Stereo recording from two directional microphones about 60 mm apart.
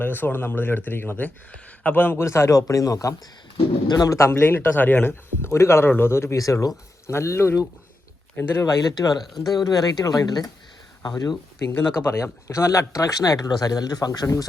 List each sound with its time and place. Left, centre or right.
0.0 s speech: left
2.2 s speech: left
3.9 s speech: left
4.2 s speech: left
5.5 s a man's voice: left
6.3 s speech: left
7.1 s a man's voice: left
8.6 s speech: left
11.9 s a man's voice: left
12.9 s speech: left